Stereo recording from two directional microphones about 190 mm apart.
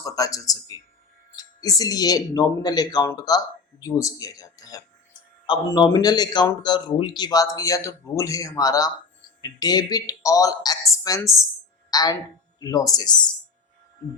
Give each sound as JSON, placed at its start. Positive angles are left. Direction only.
{"t": 0.0, "sound": "a woman's voice", "side_deg": 20}